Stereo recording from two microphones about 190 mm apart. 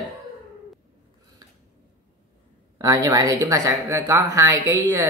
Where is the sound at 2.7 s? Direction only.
20° right (ahead or behind).